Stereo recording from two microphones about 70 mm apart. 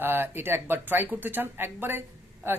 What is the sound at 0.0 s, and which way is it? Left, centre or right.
Speech, right.